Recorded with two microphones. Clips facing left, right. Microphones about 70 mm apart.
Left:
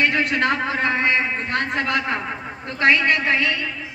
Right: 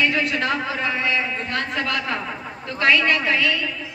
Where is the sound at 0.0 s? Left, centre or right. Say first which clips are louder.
Left 2 dB; left.